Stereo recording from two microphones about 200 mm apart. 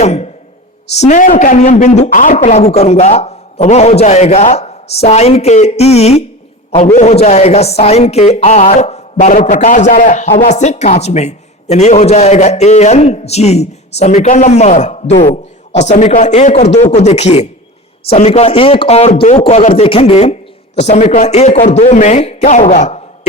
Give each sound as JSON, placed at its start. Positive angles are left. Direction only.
{"t": 0.0, "sound": "speech", "side_deg": 35}